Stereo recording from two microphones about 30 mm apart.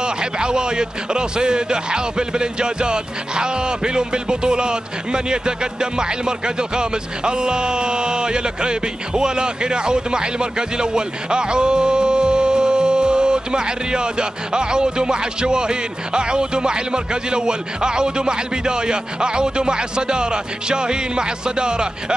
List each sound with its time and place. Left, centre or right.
0.0 s a man's voice: right